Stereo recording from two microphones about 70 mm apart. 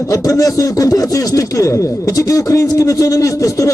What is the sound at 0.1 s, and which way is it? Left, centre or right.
Speech, left.